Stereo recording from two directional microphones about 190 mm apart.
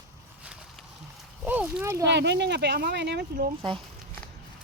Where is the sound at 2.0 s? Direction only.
65° right (ahead or behind).